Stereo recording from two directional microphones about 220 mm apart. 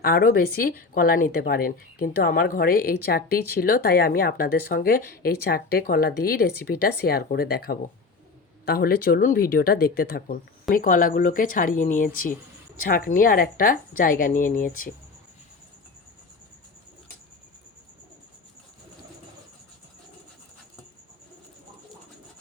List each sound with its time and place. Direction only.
0.0 s speech: 40° left (ahead or behind)